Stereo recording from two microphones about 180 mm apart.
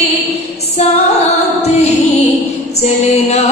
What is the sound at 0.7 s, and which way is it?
Music, 35° left (ahead or behind).